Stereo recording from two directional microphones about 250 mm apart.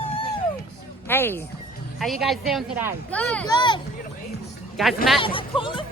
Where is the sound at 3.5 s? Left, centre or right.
Centre.